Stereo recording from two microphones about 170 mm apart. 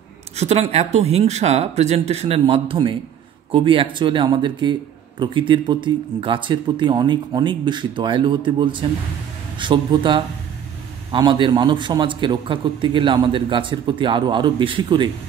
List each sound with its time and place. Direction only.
0.4 s a man's voice: 40° right (ahead or behind)